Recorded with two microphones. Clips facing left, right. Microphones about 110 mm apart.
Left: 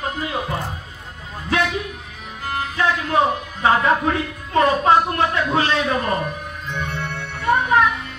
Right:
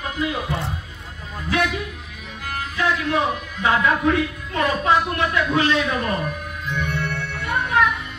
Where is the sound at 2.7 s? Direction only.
35° left (ahead or behind).